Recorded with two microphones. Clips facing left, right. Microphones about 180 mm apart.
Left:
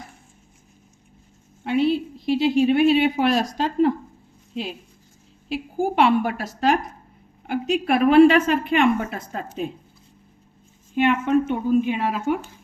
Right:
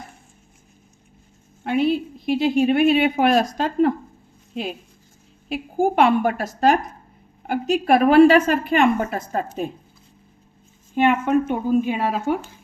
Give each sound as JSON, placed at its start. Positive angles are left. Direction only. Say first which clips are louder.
{"t": 1.6, "sound": "a woman's voice", "louder": "even", "side_deg": -50}
{"t": 5.8, "sound": "a woman's voice", "louder": "right 2 dB", "side_deg": -50}
{"t": 10.9, "sound": "a woman's voice", "louder": "right 1 dB", "side_deg": -45}